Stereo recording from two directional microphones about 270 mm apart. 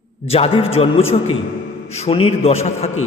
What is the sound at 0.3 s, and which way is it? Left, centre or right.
A man's voice, left.